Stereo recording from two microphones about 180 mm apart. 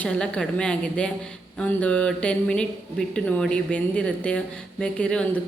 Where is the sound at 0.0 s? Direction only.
5° left (ahead or behind).